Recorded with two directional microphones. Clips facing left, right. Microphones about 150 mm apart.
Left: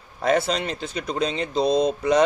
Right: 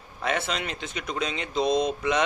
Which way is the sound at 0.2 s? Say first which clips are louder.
Left 7 dB; 35° left (ahead or behind).